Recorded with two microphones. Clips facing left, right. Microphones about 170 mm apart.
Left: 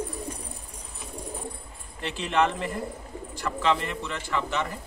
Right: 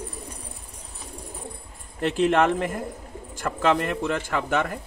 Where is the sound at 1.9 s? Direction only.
50° right (ahead or behind).